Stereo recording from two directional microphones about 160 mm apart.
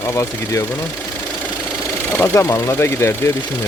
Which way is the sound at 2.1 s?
20° left (ahead or behind).